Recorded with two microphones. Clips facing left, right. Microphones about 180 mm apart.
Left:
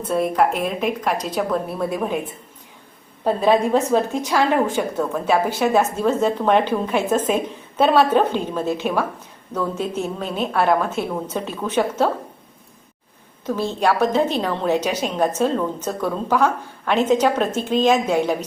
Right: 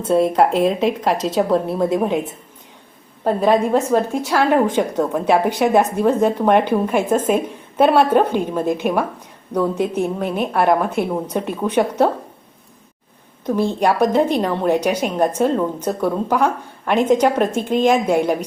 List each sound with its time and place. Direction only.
0.0 s a woman's voice: 25° right (ahead or behind)
13.4 s a woman's voice: 15° right (ahead or behind)